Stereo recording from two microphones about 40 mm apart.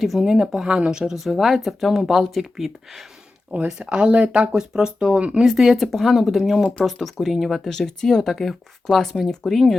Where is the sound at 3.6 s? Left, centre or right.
Right.